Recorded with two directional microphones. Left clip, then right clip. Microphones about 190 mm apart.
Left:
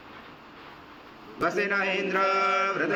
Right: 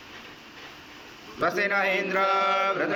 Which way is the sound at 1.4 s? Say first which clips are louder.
Right 2 dB; 20° left (ahead or behind).